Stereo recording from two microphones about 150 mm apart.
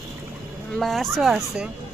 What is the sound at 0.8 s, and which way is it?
Speech, centre (ahead or behind).